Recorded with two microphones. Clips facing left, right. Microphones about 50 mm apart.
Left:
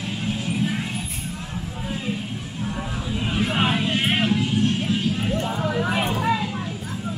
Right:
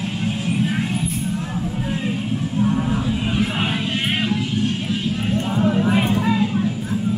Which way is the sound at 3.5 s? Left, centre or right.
Centre.